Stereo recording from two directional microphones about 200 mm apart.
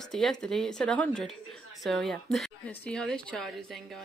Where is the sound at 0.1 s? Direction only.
Centre (ahead or behind).